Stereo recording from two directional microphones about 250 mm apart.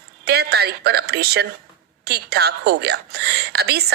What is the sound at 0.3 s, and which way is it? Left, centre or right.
A woman's voice, right.